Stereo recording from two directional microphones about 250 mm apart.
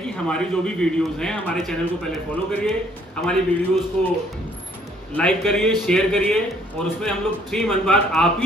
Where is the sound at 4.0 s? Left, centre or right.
Centre.